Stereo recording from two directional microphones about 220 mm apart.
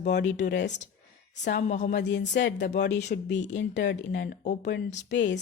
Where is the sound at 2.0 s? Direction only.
55° left (ahead or behind).